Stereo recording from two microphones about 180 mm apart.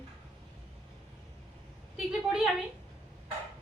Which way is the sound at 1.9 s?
5° right (ahead or behind).